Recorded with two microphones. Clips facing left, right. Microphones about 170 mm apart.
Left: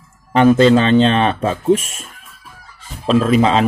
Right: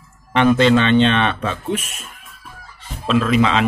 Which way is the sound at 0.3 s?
40° left (ahead or behind).